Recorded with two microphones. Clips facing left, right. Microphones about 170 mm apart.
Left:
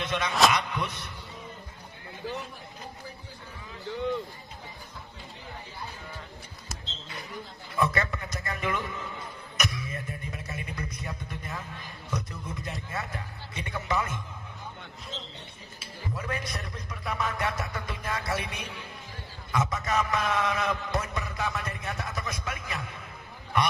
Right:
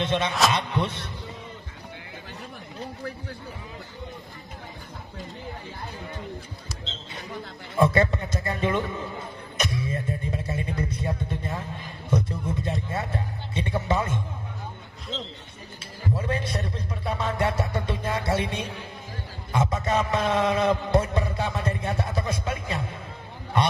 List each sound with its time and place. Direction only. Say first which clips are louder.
0.0 s mantra: right 1 dB; 25° right (ahead or behind)
7.7 s mantra: right 7 dB; 30° right (ahead or behind)
9.6 s music: right 5 dB; 30° right (ahead or behind)
12.1 s a sound: right 9 dB; 30° right (ahead or behind)
16.2 s a sound: right 4 dB; 30° right (ahead or behind)
19.5 s mantra: right 4 dB; 30° right (ahead or behind)